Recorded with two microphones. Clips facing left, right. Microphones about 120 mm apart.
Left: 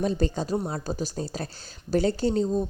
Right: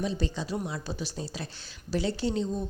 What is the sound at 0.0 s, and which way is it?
A woman's voice, 50° left (ahead or behind).